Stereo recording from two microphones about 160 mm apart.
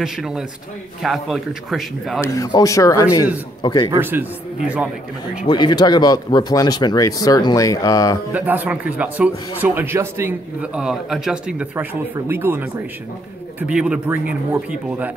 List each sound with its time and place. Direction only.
0.0 s speech: 5° right (ahead or behind)
2.2 s speech: 20° left (ahead or behind)
4.0 s a man's voice: 10° right (ahead or behind)
5.5 s speech: 25° left (ahead or behind)
8.3 s a man's voice: 10° right (ahead or behind)